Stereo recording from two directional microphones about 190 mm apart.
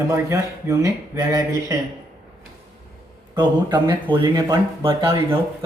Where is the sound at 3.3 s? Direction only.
25° right (ahead or behind).